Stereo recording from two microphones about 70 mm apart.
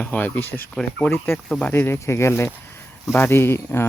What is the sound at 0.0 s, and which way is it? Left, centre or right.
Speech, left.